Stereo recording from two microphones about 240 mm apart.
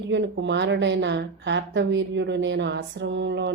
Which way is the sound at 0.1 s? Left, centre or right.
Right.